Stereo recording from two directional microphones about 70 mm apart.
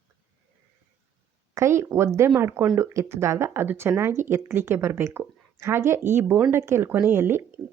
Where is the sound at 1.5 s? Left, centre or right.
Right.